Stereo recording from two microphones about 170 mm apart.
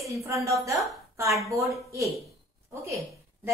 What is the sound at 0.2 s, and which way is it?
A woman's voice, 15° right (ahead or behind).